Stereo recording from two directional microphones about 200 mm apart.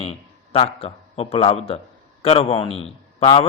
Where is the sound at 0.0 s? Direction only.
30° left (ahead or behind).